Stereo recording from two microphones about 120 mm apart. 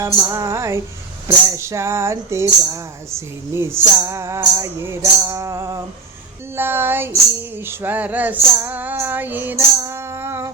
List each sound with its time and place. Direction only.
0.0 s speech: 25° right (ahead or behind)
7.5 s music: 20° right (ahead or behind)